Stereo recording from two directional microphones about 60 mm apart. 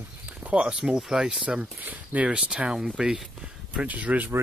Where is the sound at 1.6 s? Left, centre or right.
Right; by 3.2 s centre.